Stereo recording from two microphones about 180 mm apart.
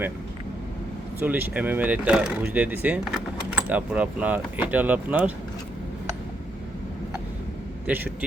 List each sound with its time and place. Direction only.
1.2 s speech: 10° right (ahead or behind)
7.9 s speech: 10° right (ahead or behind)